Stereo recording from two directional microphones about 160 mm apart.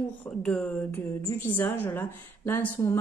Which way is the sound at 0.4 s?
5° left (ahead or behind).